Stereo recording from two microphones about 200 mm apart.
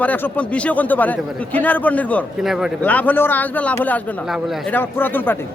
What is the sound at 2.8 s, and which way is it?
A man's voice, 10° left (ahead or behind).